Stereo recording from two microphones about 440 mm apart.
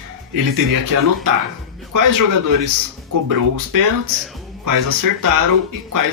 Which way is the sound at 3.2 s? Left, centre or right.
Right.